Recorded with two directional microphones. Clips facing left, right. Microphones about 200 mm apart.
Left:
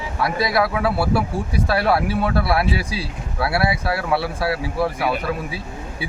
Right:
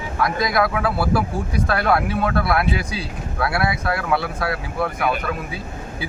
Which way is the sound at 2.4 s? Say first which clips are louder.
Even; 30° left (ahead or behind).